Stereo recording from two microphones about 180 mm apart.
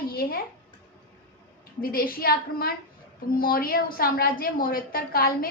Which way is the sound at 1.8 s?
55° left (ahead or behind).